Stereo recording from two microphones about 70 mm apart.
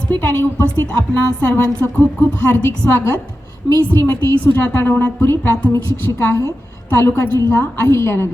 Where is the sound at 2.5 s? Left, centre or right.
Left.